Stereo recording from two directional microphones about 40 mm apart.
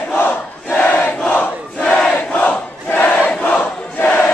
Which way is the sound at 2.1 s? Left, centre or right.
Left.